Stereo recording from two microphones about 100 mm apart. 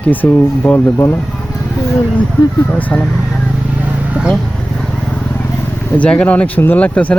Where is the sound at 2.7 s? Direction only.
10° left (ahead or behind).